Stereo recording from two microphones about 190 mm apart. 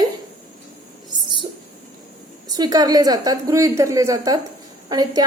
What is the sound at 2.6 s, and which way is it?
A woman's voice, 20° right (ahead or behind).